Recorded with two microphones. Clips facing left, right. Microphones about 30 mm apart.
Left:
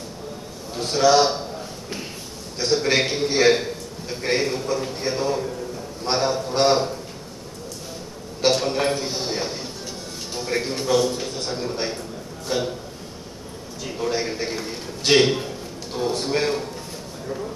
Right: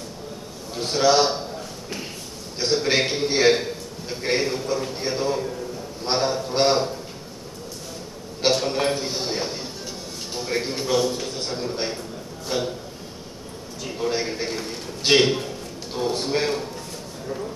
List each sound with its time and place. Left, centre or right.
0.7 s a man's voice: centre
2.6 s a man's voice: centre
8.5 s a man's voice: centre
13.8 s a man's voice: centre